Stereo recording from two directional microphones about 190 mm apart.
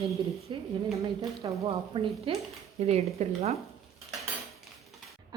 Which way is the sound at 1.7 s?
30° right (ahead or behind).